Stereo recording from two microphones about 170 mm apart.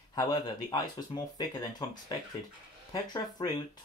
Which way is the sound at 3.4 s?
25° left (ahead or behind).